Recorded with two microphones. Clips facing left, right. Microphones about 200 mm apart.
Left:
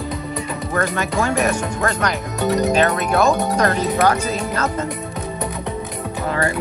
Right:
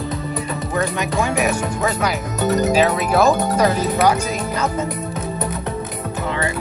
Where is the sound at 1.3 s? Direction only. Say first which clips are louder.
Even; 5° right (ahead or behind).